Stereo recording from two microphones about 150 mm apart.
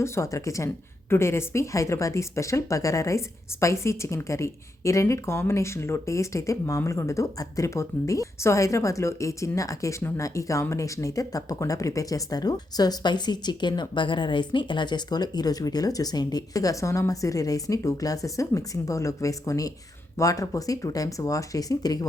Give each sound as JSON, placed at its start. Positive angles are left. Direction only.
{"t": 0.0, "sound": "speech", "side_deg": 20}